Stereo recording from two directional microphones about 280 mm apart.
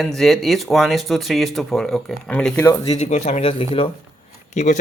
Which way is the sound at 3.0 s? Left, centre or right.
Left.